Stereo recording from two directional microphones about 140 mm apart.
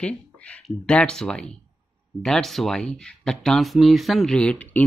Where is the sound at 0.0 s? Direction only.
10° left (ahead or behind).